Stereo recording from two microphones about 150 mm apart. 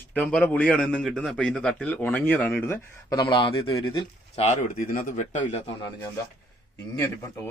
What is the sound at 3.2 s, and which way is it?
Speech, 30° left (ahead or behind).